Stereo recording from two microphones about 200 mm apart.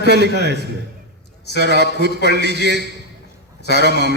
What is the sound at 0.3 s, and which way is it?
A man's voice, 55° right (ahead or behind).